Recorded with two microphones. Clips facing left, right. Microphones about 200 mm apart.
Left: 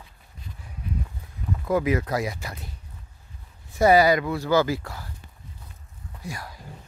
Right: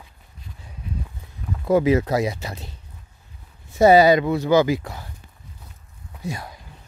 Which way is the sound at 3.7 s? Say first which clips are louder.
Right 4 dB; 25° right (ahead or behind).